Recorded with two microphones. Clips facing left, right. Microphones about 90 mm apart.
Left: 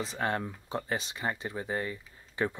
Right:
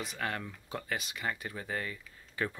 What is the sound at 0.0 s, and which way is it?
Speech, 30° left (ahead or behind).